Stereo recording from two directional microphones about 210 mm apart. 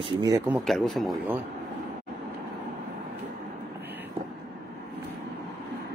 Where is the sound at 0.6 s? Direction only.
Centre (ahead or behind).